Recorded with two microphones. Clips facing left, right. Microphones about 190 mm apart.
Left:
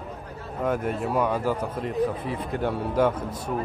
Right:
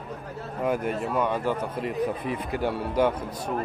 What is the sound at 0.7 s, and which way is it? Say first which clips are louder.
Speech: left 1 dB; 5° right (ahead or behind).